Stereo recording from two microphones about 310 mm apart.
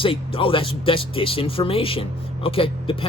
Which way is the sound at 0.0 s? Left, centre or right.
Centre.